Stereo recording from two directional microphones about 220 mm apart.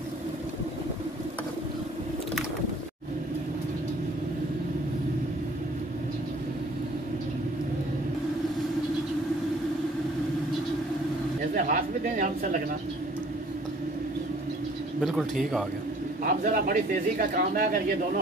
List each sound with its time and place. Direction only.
11.5 s speech: 35° right (ahead or behind)
15.0 s speech: centre (ahead or behind)
16.3 s speech: 40° right (ahead or behind)